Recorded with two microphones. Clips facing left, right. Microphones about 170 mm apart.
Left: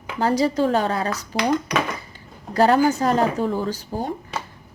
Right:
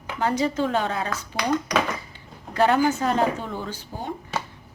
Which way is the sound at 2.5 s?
35° left (ahead or behind).